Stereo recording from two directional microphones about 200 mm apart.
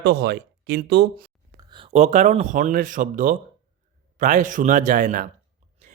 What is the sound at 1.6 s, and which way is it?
Speech, 25° right (ahead or behind).